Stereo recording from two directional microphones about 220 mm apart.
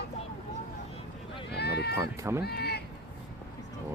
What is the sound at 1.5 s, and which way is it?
Run, 50° left (ahead or behind).